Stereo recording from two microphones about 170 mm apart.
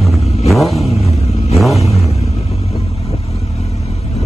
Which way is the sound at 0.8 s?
35° left (ahead or behind).